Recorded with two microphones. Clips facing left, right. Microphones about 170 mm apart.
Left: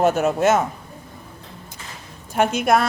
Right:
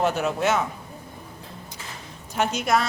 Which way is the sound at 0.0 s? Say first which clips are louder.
Left 5 dB; 50° left (ahead or behind).